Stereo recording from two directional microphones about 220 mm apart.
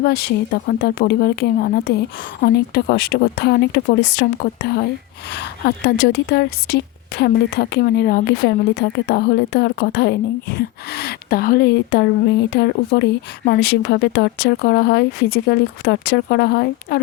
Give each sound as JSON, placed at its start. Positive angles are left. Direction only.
{"t": 0.0, "sound": "a woman's voice", "side_deg": 45}